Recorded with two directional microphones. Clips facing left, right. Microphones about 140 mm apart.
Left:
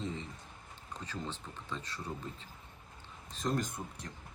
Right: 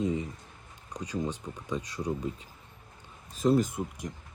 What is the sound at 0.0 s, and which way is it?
Speech, 15° right (ahead or behind).